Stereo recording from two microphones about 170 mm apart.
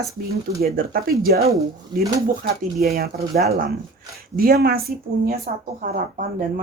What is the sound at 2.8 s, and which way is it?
Speech, 65° right (ahead or behind).